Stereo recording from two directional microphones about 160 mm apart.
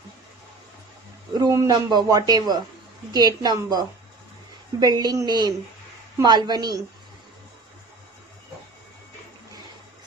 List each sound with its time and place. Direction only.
1.4 s a man's voice: 20° right (ahead or behind)